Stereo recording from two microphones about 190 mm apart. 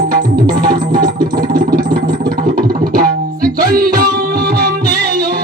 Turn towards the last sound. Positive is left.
turn(degrees=-50)  # may be behind; listen again after turning